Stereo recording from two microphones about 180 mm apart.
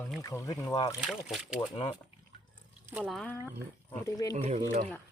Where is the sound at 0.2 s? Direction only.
20° left (ahead or behind).